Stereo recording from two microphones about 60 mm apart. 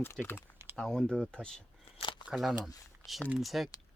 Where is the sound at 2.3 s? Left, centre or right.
Centre.